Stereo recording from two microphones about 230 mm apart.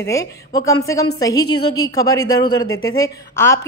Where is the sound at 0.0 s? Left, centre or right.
Centre.